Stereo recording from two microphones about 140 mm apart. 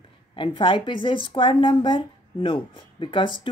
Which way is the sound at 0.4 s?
35° left (ahead or behind).